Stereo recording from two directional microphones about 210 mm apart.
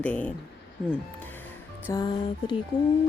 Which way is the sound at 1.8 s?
20° left (ahead or behind).